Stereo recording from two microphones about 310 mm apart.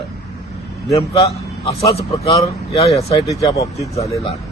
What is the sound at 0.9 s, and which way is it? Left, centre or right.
A man's voice, centre.